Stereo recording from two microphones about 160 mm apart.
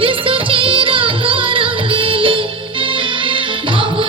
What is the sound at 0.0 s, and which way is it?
Music, 35° right (ahead or behind).